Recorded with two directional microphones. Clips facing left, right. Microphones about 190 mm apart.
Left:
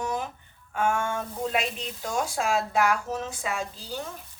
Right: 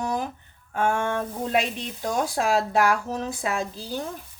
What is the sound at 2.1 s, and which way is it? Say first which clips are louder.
A woman's voice: right 3 dB; 40° right (ahead or behind).